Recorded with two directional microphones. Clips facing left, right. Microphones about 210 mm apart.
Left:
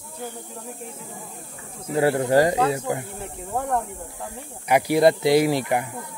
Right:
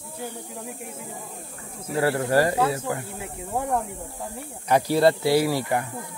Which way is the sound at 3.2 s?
10° right (ahead or behind).